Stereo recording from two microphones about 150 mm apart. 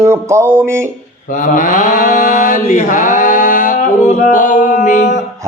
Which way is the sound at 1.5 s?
60° left (ahead or behind).